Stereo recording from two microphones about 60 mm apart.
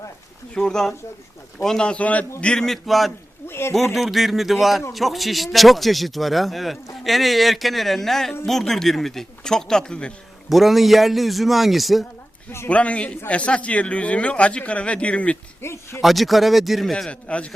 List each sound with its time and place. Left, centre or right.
0.5 s speech: centre
2.6 s a man's voice: centre
3.4 s a sound: left
3.9 s a man's voice: centre
10.5 s a man's voice: centre
12.6 s a man's voice: left
15.6 s speech: left
16.0 s a man's voice: centre
17.1 s a man's voice: centre